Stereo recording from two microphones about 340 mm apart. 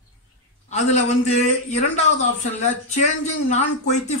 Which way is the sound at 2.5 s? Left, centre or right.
Centre.